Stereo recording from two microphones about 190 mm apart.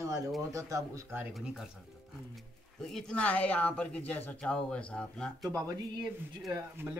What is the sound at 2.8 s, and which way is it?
Speech, 5° left (ahead or behind).